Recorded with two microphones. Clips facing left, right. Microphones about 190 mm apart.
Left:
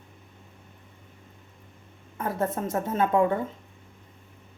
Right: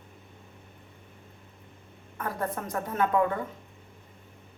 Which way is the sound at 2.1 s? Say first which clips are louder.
Left 4 dB; 25° left (ahead or behind).